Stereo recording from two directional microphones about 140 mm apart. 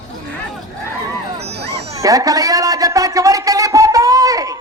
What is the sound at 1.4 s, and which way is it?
Music, 50° right (ahead or behind).